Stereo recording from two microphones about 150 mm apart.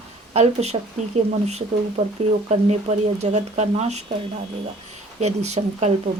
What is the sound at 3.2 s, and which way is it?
Speech, 50° right (ahead or behind).